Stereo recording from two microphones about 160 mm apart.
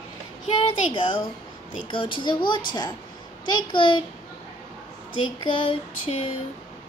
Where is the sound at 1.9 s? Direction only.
30° left (ahead or behind).